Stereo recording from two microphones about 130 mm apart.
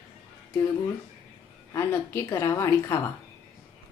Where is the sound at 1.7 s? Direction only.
20° left (ahead or behind).